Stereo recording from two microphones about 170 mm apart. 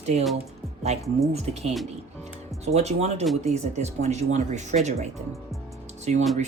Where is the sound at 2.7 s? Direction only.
40° right (ahead or behind).